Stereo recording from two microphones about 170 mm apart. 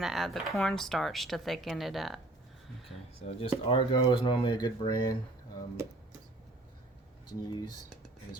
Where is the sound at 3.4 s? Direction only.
30° left (ahead or behind).